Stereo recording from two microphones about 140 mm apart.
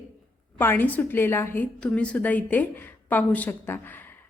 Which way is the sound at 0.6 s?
15° left (ahead or behind).